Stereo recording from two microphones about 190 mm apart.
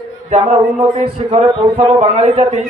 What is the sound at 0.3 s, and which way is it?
A man's voice, 35° right (ahead or behind).